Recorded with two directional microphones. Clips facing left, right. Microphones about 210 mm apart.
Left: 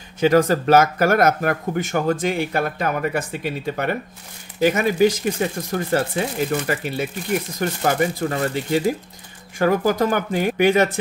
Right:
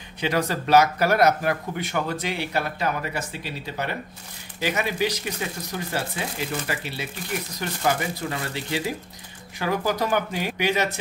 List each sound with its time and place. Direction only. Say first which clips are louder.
0.2 s speech: left 9 dB; 45° left (ahead or behind)